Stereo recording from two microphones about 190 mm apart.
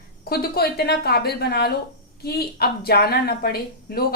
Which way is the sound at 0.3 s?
55° left (ahead or behind).